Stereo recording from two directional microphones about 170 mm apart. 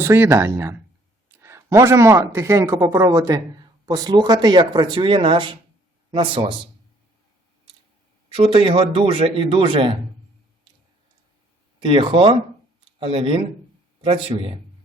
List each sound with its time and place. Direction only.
0.0 s a man's voice: 15° right (ahead or behind); by 6.6 s 30° right (ahead or behind)
8.3 s a man's voice: 30° right (ahead or behind)
11.8 s a man's voice: 30° right (ahead or behind)